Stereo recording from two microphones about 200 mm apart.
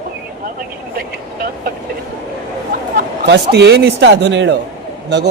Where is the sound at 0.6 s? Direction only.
45° right (ahead or behind).